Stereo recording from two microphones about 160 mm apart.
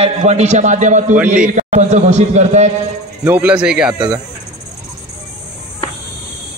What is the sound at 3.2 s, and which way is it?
Speech, 10° right (ahead or behind).